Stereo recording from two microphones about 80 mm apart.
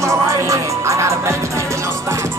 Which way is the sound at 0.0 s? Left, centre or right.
Right.